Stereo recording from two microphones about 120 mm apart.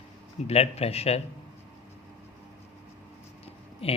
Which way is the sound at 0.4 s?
60° left (ahead or behind).